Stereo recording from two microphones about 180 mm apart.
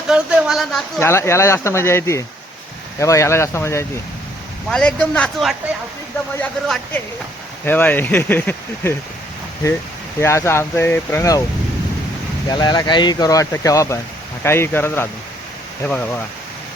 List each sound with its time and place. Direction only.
0.1 s speech: 5° right (ahead or behind)
0.9 s speech: 15° left (ahead or behind)
10.2 s speech: 15° left (ahead or behind)
12.5 s speech: 25° left (ahead or behind)